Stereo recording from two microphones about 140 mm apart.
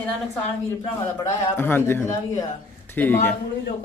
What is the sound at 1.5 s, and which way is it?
Speech, 15° left (ahead or behind).